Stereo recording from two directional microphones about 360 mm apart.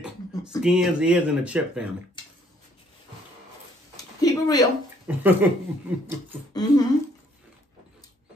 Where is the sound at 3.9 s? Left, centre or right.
Centre.